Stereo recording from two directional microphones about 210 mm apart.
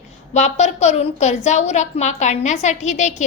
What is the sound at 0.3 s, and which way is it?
A woman's voice, 30° left (ahead or behind).